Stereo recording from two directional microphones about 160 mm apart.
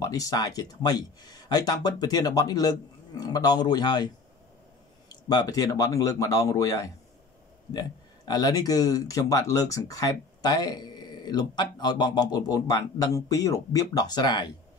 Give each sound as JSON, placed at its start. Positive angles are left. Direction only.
{"t": 0.0, "sound": "speech", "side_deg": 20}
{"t": 5.3, "sound": "speech", "side_deg": 25}
{"t": 8.3, "sound": "speech", "side_deg": 25}